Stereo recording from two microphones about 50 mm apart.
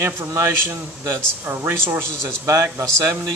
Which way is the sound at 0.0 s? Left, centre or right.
Right.